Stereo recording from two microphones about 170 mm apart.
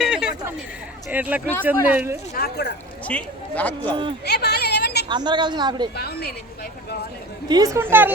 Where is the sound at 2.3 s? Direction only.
70° left (ahead or behind).